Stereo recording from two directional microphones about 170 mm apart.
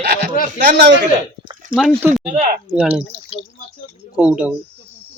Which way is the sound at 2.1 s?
45° right (ahead or behind).